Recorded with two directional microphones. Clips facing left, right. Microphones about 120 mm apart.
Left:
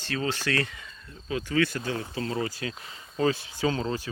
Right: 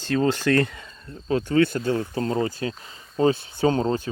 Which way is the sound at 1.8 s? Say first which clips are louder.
Right 7 dB; 35° right (ahead or behind).